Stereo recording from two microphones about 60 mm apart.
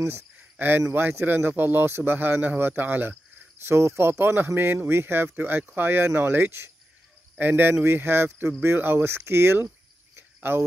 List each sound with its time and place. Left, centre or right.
0.0 s speech: right
3.6 s speech: right
10.1 s cricket: right